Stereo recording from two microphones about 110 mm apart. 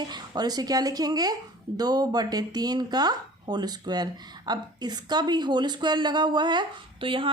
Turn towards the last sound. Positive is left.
turn(degrees=-50)  # may be behind; listen again after turning